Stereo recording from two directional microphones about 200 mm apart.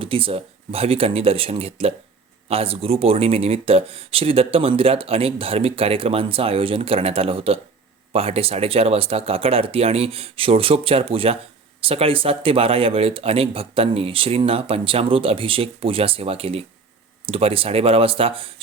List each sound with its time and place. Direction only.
0.0 s speech: 25° right (ahead or behind)